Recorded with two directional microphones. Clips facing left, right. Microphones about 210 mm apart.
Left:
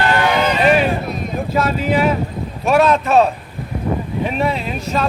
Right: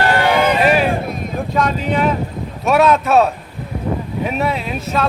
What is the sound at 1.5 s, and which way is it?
Speech, 5° left (ahead or behind).